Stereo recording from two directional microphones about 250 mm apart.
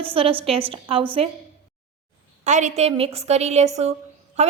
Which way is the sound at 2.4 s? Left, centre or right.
Right.